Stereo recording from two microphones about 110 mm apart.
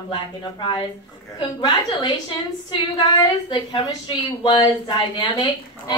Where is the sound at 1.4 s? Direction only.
45° left (ahead or behind).